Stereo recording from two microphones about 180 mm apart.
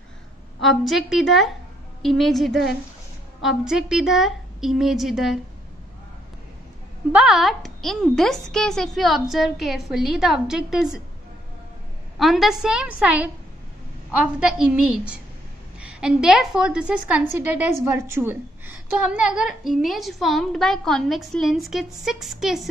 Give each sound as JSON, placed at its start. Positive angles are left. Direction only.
{"t": 0.6, "sound": "a woman's voice", "side_deg": 0}
{"t": 7.1, "sound": "a woman's voice", "side_deg": -5}
{"t": 12.2, "sound": "a woman's voice", "side_deg": 0}